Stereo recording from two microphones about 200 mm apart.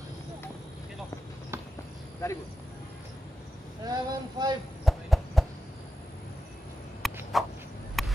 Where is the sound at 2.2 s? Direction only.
15° left (ahead or behind).